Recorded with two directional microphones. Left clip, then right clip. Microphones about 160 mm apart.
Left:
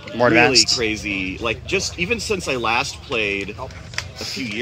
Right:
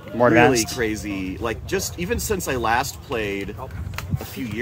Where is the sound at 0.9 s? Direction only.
50° right (ahead or behind).